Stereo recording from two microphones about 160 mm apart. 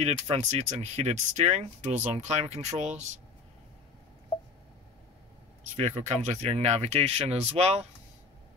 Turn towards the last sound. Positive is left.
turn(degrees=-40)  # may be behind; listen again after turning